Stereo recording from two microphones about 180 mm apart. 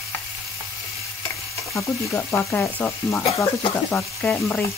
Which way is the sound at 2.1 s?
15° left (ahead or behind).